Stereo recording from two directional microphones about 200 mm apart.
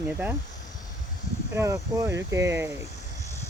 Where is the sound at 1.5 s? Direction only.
15° right (ahead or behind).